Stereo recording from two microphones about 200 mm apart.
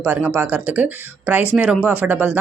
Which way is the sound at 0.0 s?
5° right (ahead or behind).